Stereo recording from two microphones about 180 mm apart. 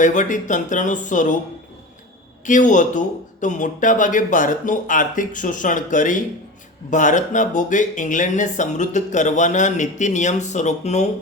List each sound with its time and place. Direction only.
0.0 s speech: 45° left (ahead or behind)
2.5 s speech: 45° left (ahead or behind)